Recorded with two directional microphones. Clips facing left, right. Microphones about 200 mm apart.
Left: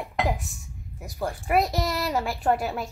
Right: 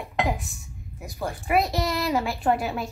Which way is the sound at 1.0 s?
45° left (ahead or behind).